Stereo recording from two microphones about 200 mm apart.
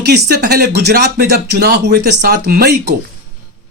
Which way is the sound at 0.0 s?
55° right (ahead or behind).